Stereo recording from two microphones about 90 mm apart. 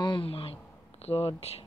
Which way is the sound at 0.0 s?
75° left (ahead or behind).